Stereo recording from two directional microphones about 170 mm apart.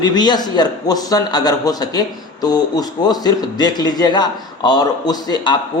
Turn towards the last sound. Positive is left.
turn(degrees=25)  # may be behind; listen again after turning